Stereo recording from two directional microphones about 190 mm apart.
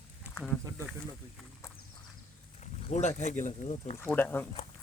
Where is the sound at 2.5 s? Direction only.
35° left (ahead or behind).